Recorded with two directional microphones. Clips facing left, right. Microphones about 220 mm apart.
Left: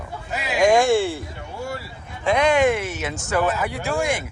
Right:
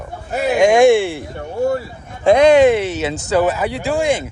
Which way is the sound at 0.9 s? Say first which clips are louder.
Right 3 dB; 65° right (ahead or behind).